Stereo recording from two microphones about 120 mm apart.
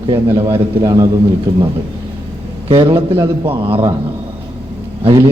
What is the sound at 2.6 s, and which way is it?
A man's voice, 45° right (ahead or behind).